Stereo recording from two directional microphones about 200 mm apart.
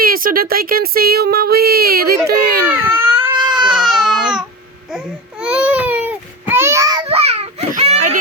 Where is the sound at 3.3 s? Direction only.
20° right (ahead or behind).